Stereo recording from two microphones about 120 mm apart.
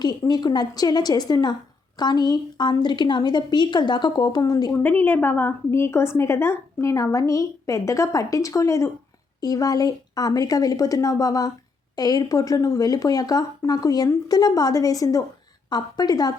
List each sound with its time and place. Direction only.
0.0 s speech: 35° left (ahead or behind)
4.8 s a woman's voice: 15° left (ahead or behind); by 16.3 s 35° left (ahead or behind)